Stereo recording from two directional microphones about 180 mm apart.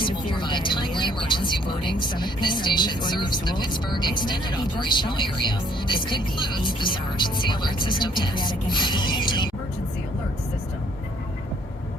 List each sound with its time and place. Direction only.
0.0 s speech: 25° left (ahead or behind)